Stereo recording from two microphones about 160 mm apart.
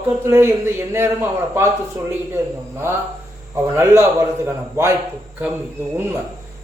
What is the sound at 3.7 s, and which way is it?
Speech, 15° right (ahead or behind).